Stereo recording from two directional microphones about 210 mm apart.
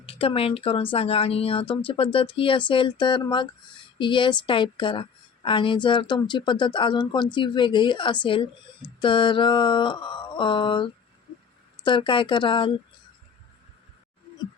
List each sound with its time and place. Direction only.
0.0 s a woman's voice: 25° left (ahead or behind)